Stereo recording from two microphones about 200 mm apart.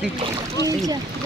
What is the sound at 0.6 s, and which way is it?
Speech, 15° right (ahead or behind).